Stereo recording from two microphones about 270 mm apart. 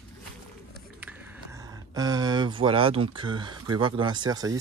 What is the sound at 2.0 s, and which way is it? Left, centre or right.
Speech, centre.